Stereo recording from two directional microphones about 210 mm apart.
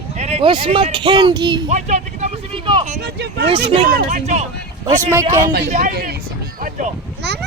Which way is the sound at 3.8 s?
50° right (ahead or behind).